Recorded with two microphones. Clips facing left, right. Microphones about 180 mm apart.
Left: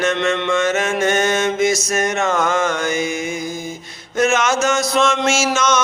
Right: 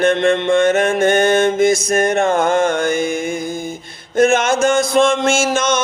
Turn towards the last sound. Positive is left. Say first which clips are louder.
# right 2 dB
turn(degrees=-55)  # may be behind; listen again after turning